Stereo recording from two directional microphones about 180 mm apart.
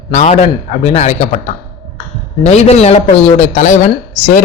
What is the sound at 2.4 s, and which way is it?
A man's voice, 35° left (ahead or behind).